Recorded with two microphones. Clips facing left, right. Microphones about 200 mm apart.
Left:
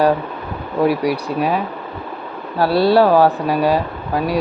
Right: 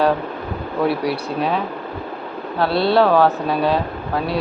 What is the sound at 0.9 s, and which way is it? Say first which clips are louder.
Speech: left 3 dB; 10° left (ahead or behind).